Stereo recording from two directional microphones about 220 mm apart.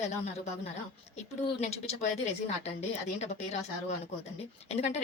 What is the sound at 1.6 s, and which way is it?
A woman's voice, 30° left (ahead or behind).